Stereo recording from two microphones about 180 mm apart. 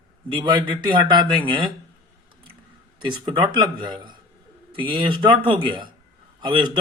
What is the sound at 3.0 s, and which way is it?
A man's voice, 25° right (ahead or behind).